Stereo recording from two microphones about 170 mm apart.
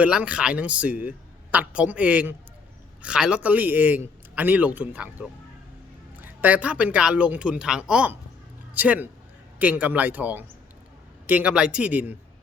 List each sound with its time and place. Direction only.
0.0 s a man's voice: 5° right (ahead or behind)
6.2 s a man's voice: 10° right (ahead or behind)